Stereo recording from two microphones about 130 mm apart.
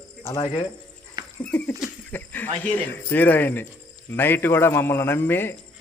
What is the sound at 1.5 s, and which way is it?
A man's voice, 10° left (ahead or behind).